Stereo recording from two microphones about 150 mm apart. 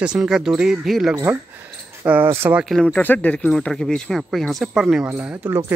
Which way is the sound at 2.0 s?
15° right (ahead or behind).